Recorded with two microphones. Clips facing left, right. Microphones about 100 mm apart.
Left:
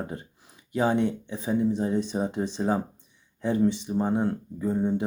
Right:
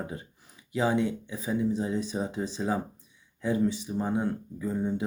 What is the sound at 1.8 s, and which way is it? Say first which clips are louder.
Speech: left 4 dB; 50° left (ahead or behind).